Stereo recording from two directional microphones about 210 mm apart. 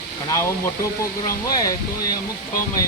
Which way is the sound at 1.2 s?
15° left (ahead or behind).